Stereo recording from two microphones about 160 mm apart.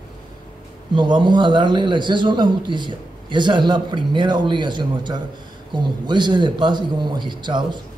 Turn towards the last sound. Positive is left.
turn(degrees=-30)  # may be behind; listen again after turning